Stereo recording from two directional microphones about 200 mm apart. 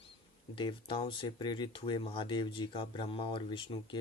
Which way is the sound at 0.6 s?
25° left (ahead or behind).